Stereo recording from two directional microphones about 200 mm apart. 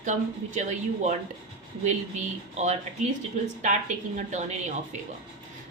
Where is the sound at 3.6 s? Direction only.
35° right (ahead or behind).